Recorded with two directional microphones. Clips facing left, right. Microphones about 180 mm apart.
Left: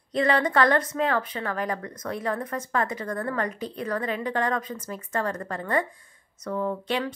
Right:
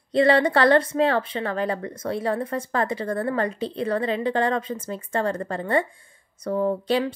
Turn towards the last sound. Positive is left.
turn(degrees=-35)  # may be behind; listen again after turning